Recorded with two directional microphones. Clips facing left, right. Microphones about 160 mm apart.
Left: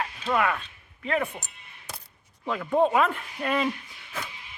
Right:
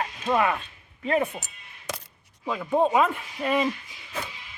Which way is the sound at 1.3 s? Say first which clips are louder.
Right 3 dB; 90° right.